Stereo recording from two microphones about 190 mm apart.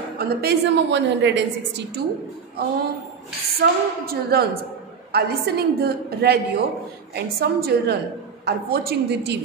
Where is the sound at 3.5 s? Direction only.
55° right (ahead or behind).